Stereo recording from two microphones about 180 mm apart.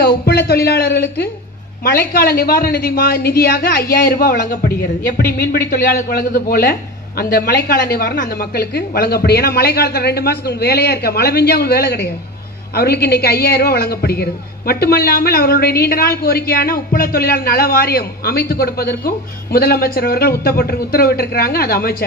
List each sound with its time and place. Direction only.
0.2 s a woman's voice: 60° left (ahead or behind)